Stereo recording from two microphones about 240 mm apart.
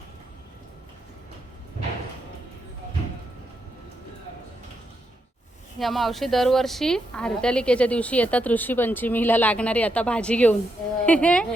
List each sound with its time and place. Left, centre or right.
5.8 s speech: centre